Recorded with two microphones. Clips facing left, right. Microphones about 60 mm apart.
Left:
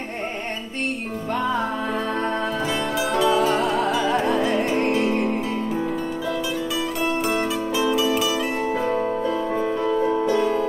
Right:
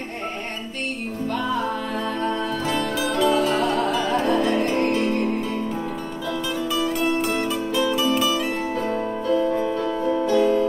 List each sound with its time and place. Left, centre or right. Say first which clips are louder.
3.0 s music: left 1 dB; centre
6.8 s music: right 3 dB; centre
9.3 s music: right 2 dB; left
10.4 s music: right 3 dB; centre